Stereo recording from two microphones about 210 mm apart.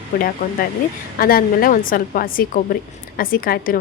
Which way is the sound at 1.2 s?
45° left (ahead or behind).